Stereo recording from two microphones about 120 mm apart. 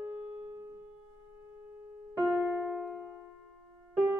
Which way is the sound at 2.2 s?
5° left (ahead or behind).